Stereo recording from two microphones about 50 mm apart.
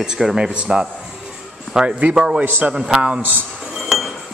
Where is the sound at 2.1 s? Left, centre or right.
Centre.